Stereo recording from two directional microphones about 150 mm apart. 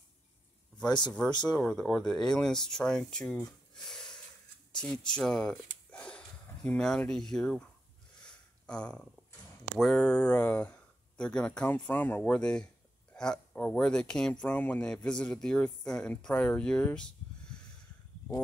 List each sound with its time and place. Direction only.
0.8 s speech: 30° left (ahead or behind)
1.6 s speech: 5° left (ahead or behind)
8.2 s a sound: 5° left (ahead or behind)
9.8 s speech: 5° left (ahead or behind)